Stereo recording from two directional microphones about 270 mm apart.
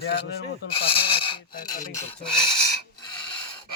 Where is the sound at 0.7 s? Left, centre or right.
Centre.